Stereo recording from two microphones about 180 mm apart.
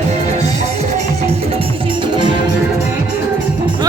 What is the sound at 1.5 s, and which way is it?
Music, 25° right (ahead or behind).